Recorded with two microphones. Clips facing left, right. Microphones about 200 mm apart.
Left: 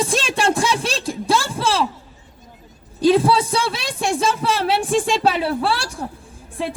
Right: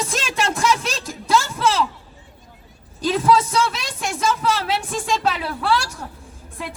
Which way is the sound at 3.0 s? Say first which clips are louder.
Left 3 dB; 30° left (ahead or behind).